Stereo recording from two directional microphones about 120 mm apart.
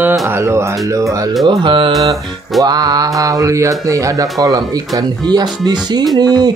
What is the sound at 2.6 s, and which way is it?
Speech, 35° right (ahead or behind).